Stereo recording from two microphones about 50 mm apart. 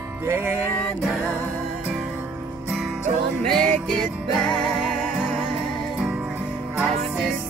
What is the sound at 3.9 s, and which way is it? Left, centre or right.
Music, centre.